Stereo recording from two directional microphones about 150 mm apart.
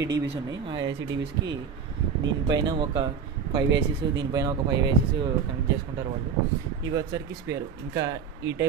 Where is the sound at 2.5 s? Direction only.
30° right (ahead or behind).